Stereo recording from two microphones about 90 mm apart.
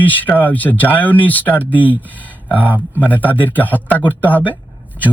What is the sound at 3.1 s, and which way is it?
A man's voice, 20° left (ahead or behind).